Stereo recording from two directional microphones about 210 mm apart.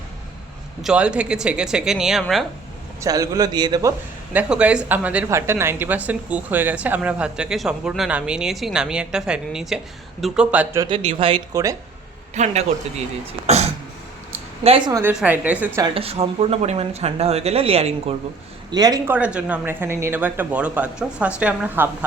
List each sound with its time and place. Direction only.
0.8 s a woman's voice: 5° right (ahead or behind)
3.0 s a man's voice: 15° right (ahead or behind)
10.8 s speech: 25° right (ahead or behind)
12.3 s a man's voice: 30° right (ahead or behind)
14.6 s speech: 25° right (ahead or behind)
15.1 s a man's voice: 5° right (ahead or behind)
15.8 s a man's voice: 25° right (ahead or behind)
19.1 s a man's voice: 5° right (ahead or behind)